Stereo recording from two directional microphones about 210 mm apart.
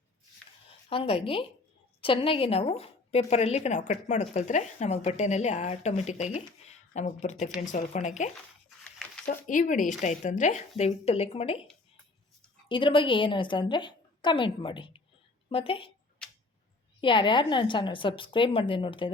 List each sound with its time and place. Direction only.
0.9 s a woman's voice: 25° left (ahead or behind)
12.6 s a woman's voice: 25° left (ahead or behind)
17.0 s a woman's voice: 25° left (ahead or behind)